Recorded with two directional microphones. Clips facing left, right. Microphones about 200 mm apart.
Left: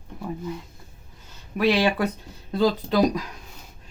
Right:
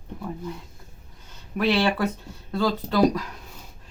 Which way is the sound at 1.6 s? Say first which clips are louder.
Left 1 dB; 15° left (ahead or behind).